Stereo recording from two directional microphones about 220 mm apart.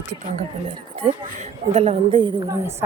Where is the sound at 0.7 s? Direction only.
25° right (ahead or behind).